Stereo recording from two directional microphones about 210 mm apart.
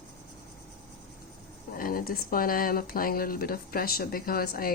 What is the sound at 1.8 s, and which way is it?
A woman's voice, 45° left (ahead or behind).